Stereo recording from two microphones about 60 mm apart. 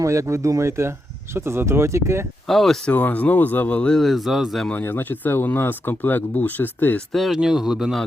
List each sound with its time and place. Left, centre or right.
0.0 s speech: right
2.5 s speech: centre
2.8 s speech: left
3.9 s speech: centre
4.7 s speech: left
7.1 s speech: centre
7.3 s speech: centre